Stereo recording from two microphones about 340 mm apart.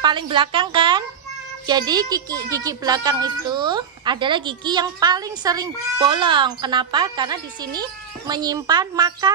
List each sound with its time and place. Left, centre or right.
0.0 s speech: centre